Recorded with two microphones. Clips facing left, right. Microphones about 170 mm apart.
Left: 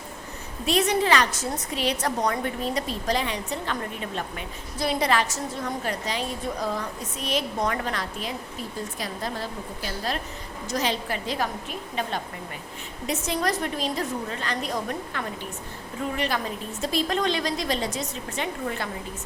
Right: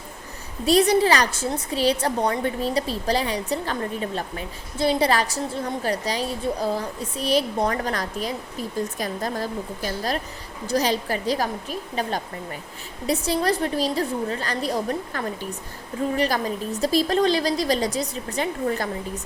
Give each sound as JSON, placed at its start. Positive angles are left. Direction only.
{"t": 0.6, "sound": "a woman's voice", "side_deg": -35}